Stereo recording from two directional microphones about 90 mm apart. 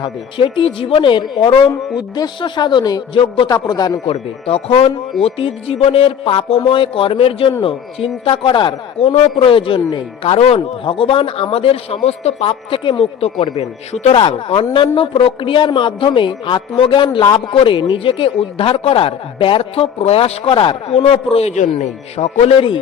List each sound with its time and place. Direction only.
0.0 s speech: 70° left (ahead or behind); by 3.0 s 55° left (ahead or behind)
3.2 s a woman's voice: 75° left (ahead or behind)
3.5 s speech: 50° left (ahead or behind)
4.0 s speech: 85° left
14.1 s a woman's voice: 80° left
17.3 s speech: 85° left